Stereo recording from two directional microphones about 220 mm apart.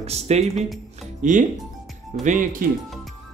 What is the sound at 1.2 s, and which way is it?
Speech, 35° right (ahead or behind).